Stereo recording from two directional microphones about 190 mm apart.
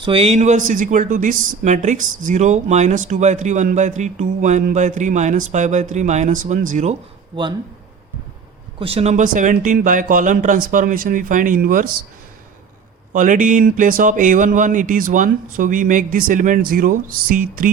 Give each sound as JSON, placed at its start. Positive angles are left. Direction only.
{"t": 0.0, "sound": "speech", "side_deg": -30}
{"t": 8.8, "sound": "speech", "side_deg": -30}
{"t": 13.1, "sound": "speech", "side_deg": -45}